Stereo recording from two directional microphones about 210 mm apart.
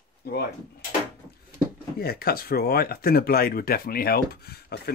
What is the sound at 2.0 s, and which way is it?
Speech, 45° left (ahead or behind).